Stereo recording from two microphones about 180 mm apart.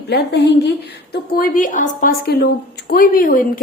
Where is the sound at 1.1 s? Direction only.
55° left (ahead or behind).